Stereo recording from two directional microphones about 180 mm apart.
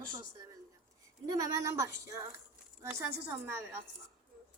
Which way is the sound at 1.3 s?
15° right (ahead or behind).